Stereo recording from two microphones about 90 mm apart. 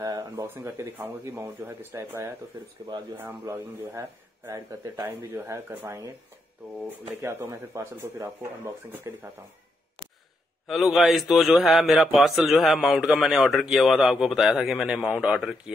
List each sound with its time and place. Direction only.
0.0 s speech: 45° right (ahead or behind)
0.6 s speech: 25° right (ahead or behind)
3.2 s speech: 25° right (ahead or behind)
5.0 s speech: 25° right (ahead or behind)
7.2 s speech: 30° right (ahead or behind)
10.7 s a man's voice: centre (ahead or behind)